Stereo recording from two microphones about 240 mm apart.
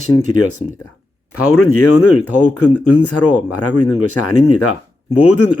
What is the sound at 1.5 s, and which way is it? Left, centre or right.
Speech, left.